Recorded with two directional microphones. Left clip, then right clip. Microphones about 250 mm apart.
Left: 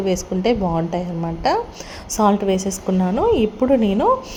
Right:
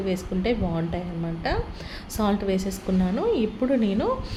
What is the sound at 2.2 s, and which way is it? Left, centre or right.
A woman's voice, centre.